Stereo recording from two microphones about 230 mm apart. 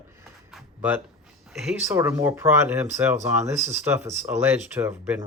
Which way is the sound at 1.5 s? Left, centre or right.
Centre.